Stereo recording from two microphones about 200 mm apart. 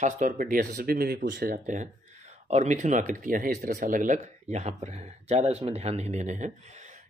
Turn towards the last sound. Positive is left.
turn(degrees=-35)  # may be behind; listen again after turning